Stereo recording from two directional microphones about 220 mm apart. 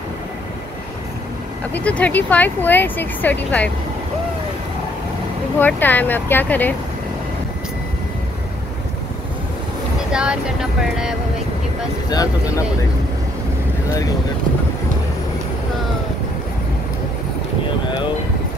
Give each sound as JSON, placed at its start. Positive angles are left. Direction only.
{"t": 1.7, "sound": "speech", "side_deg": 5}
{"t": 5.6, "sound": "speech", "side_deg": 10}
{"t": 10.1, "sound": "speech", "side_deg": -5}
{"t": 12.1, "sound": "speech", "side_deg": 15}